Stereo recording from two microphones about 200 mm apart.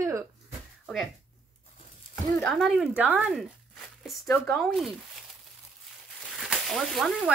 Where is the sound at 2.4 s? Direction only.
Centre (ahead or behind).